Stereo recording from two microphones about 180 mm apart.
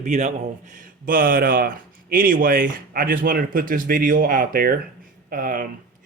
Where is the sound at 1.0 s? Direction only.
50° right (ahead or behind).